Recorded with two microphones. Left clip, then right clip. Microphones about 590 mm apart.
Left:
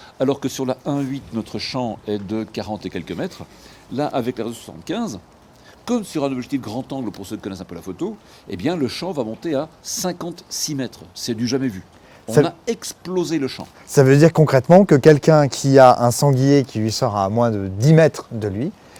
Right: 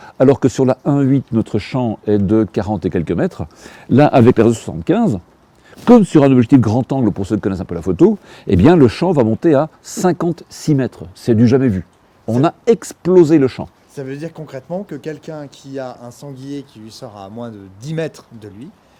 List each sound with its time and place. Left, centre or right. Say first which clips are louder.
0.2 s speech: right 9 dB; right
3.9 s speech: right 12 dB; right
13.9 s speech: left 16 dB; left